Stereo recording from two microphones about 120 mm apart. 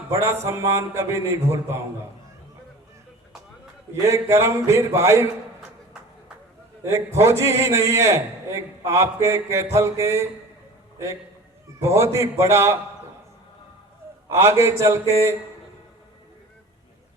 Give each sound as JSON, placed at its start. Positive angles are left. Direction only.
{"t": 0.1, "sound": "a man's voice", "side_deg": -25}
{"t": 3.9, "sound": "a man's voice", "side_deg": -25}
{"t": 5.5, "sound": "music", "side_deg": -5}
{"t": 6.8, "sound": "a man's voice", "side_deg": -25}
{"t": 14.3, "sound": "a man's voice", "side_deg": -25}